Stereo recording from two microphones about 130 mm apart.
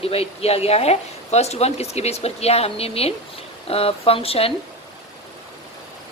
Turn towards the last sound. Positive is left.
turn(degrees=50)  # may be behind; listen again after turning